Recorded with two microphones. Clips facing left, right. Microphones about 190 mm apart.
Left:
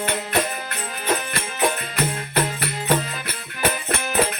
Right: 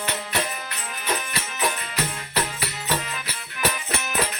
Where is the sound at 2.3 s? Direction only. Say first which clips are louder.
Left 4 dB; 55° left (ahead or behind).